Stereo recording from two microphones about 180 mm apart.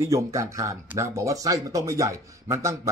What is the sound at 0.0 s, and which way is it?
Speech, 15° right (ahead or behind).